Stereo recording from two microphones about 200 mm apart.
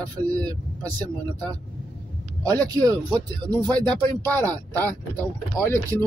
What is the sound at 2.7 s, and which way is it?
Speech, 20° right (ahead or behind).